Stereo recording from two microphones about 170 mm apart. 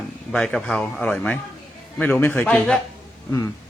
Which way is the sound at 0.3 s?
5° left (ahead or behind).